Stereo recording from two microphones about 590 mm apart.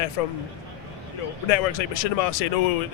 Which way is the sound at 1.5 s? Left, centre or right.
Left.